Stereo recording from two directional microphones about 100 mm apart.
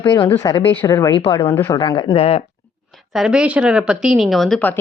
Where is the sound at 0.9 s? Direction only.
35° left (ahead or behind).